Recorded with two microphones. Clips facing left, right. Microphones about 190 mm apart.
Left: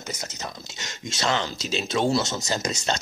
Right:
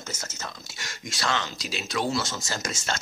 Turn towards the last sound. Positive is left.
turn(degrees=20)  # may be behind; listen again after turning